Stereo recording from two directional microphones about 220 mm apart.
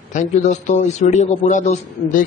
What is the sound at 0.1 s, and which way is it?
A man's voice, 35° left (ahead or behind).